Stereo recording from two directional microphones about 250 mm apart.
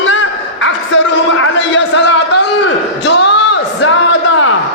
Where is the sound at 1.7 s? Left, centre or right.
Left.